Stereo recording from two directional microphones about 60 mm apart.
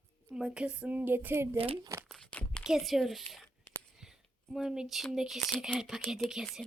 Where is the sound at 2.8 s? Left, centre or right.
Centre.